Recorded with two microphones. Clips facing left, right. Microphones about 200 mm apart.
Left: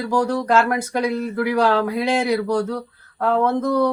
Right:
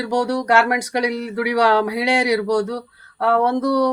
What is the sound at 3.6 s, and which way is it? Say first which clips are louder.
Speech: right 1 dB; 80° right.